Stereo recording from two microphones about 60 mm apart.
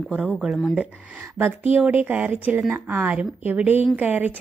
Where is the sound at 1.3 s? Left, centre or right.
Right.